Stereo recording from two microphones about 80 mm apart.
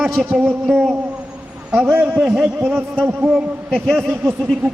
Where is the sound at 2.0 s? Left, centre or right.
Centre.